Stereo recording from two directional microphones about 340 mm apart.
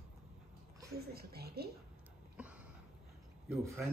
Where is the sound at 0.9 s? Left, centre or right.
Right.